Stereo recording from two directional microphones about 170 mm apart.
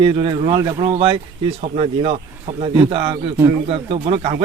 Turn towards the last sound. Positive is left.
turn(degrees=-35)  # may be behind; listen again after turning